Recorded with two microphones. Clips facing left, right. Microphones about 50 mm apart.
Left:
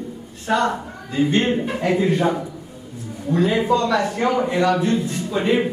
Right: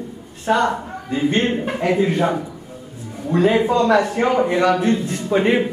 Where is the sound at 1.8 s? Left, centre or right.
Right.